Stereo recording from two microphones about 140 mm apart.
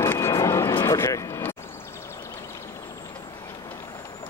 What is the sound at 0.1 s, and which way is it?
Vehicle, 20° left (ahead or behind).